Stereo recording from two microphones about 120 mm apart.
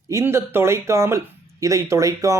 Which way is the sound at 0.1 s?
20° right (ahead or behind).